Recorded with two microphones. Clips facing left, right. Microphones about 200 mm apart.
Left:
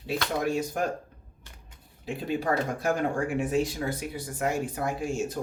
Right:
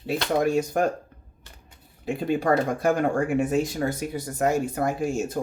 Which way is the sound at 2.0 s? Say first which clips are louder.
Right 5 dB; 55° right (ahead or behind).